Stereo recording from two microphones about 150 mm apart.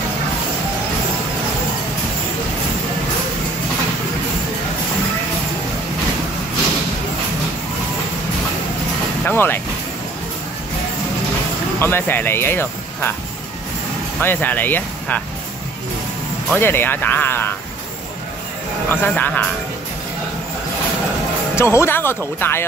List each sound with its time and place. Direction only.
9.2 s vehicle: 15° left (ahead or behind)
11.8 s speech: 15° left (ahead or behind)
14.2 s speech: 10° left (ahead or behind)
16.5 s speech: 15° left (ahead or behind)
18.9 s speech: 10° left (ahead or behind)
21.5 s speech: 15° left (ahead or behind)